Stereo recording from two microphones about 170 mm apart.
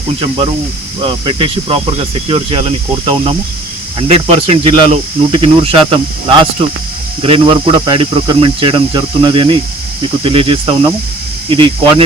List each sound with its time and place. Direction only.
1.0 s speech: 30° right (ahead or behind)